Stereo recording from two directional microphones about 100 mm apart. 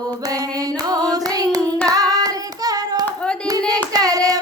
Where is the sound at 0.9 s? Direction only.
40° right (ahead or behind).